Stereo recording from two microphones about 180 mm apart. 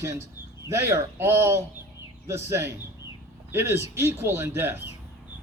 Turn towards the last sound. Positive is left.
turn(degrees=-15)  # may be behind; listen again after turning